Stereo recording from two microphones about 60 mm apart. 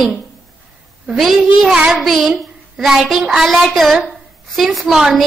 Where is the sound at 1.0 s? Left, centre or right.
Centre.